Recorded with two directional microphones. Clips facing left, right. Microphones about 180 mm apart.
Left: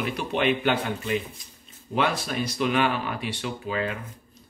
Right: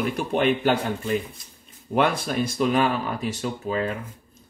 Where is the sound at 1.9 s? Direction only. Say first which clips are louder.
Right 4 dB; 55° right (ahead or behind).